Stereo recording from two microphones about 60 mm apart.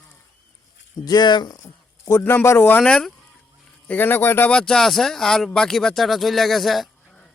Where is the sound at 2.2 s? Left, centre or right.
Left.